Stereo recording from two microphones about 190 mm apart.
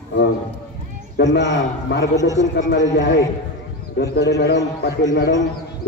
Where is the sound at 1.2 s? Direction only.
65° left (ahead or behind).